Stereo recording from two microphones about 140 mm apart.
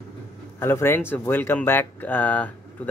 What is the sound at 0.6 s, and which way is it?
Speech, 15° left (ahead or behind).